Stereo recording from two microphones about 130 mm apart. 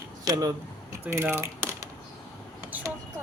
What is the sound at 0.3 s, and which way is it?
Speech, 25° right (ahead or behind).